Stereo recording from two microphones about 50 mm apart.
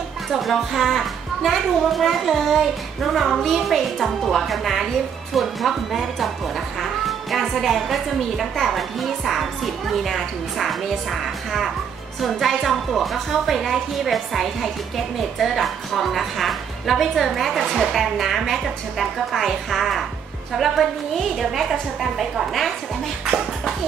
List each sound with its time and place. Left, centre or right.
0.3 s a woman's voice: centre